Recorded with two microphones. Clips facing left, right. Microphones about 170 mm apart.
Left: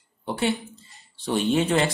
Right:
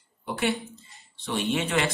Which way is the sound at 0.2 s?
30° left (ahead or behind).